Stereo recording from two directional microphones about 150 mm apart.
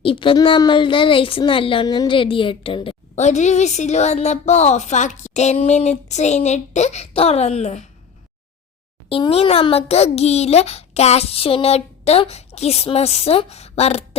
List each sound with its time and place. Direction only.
0.0 s speech: 35° left (ahead or behind)
3.2 s a child's voice: 50° left (ahead or behind)
9.0 s a child's voice: 40° left (ahead or behind)